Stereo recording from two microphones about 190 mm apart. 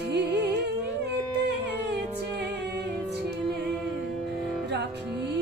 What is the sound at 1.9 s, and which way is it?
Music, 60° right (ahead or behind).